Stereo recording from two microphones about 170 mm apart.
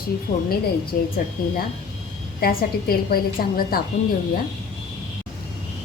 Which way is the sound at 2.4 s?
60° left (ahead or behind).